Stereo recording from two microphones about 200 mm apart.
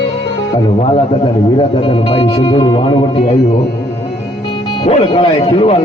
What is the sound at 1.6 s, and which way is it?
Speech, 25° left (ahead or behind).